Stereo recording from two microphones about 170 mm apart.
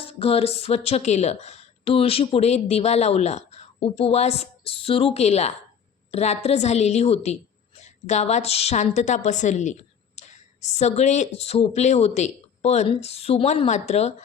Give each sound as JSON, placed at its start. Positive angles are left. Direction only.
{"t": 0.0, "sound": "a woman's voice", "side_deg": 35}